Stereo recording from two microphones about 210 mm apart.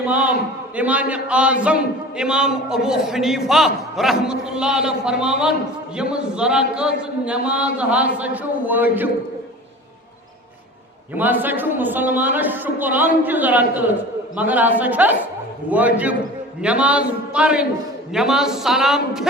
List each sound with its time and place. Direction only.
0.1 s a man's voice: 5° right (ahead or behind)
11.1 s a man's voice: 10° right (ahead or behind)